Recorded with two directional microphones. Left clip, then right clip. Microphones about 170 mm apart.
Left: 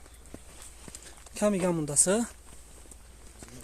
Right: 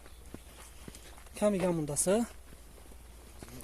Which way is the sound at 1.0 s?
30° left (ahead or behind).